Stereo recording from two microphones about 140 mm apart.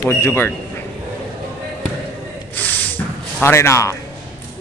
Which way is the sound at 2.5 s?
15° left (ahead or behind).